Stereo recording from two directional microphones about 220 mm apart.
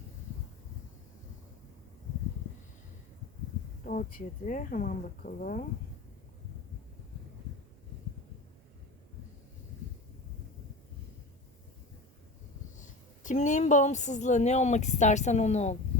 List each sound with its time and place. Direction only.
3.8 s a woman's voice: 35° left (ahead or behind)
12.7 s a woman's voice: 35° left (ahead or behind)